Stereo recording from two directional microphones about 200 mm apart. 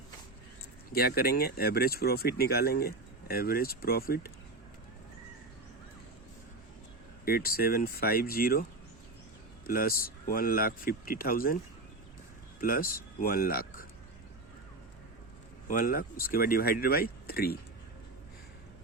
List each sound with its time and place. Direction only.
0.9 s speech: 50° left (ahead or behind)
7.3 s speech: 50° left (ahead or behind)
9.6 s speech: 45° left (ahead or behind)
12.5 s speech: 45° left (ahead or behind)
15.6 s speech: 45° left (ahead or behind)